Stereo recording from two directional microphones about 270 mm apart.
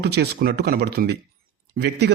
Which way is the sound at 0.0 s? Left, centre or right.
Right.